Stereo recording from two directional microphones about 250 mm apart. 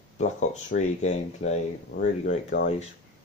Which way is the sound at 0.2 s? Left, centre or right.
Left.